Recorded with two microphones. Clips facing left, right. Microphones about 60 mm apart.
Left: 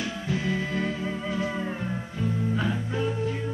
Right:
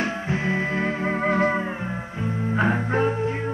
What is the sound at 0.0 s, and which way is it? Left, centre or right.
Music, right.